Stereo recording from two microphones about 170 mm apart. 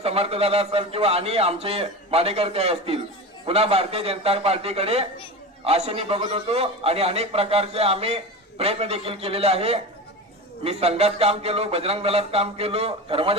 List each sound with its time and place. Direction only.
0.0 s a man's voice: 35° right (ahead or behind)